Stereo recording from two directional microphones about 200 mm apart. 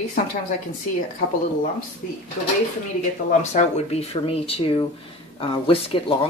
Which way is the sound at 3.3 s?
35° left (ahead or behind).